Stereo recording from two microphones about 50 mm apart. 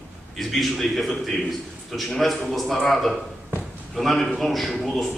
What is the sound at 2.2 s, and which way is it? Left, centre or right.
A man's voice, centre.